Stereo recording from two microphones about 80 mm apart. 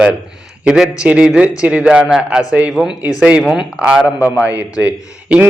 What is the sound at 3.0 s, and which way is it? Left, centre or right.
Speech, left.